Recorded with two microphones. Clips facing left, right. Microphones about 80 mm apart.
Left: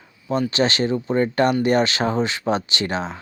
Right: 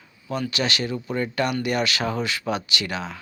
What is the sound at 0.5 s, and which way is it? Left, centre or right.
Speech, left.